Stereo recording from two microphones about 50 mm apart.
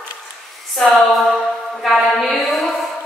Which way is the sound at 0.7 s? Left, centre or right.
Centre.